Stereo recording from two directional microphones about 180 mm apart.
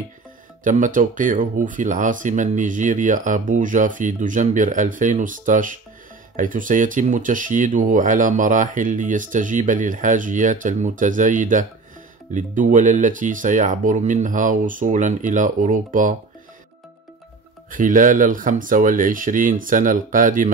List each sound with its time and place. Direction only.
0.7 s speech: 45° right (ahead or behind)
17.6 s speech: 45° right (ahead or behind)